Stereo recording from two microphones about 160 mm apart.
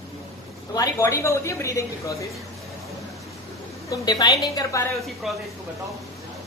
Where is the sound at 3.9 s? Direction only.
25° left (ahead or behind).